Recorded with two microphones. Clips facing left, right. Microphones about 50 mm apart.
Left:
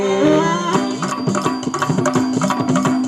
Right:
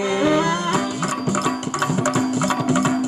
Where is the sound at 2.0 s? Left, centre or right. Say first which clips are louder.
Left 4 dB; centre.